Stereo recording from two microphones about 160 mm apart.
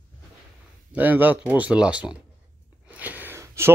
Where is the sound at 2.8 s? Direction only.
10° right (ahead or behind).